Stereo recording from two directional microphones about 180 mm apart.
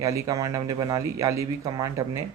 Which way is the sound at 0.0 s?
20° right (ahead or behind).